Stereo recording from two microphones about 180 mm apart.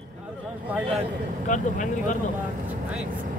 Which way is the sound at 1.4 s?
45° left (ahead or behind).